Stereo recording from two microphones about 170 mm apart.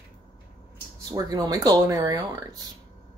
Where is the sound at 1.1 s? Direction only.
25° right (ahead or behind).